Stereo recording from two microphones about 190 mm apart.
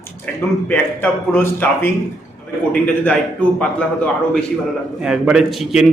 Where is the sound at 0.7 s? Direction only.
10° left (ahead or behind).